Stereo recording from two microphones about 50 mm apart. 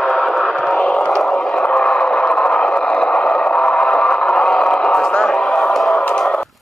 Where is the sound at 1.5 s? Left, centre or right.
Left; by 6.0 s centre.